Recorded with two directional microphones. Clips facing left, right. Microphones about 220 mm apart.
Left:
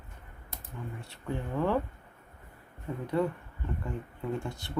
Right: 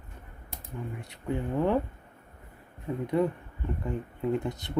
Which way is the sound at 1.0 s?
20° right (ahead or behind).